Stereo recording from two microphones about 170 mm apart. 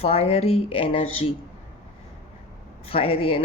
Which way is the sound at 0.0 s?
35° left (ahead or behind).